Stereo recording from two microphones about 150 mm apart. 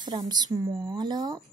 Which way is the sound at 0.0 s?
25° right (ahead or behind).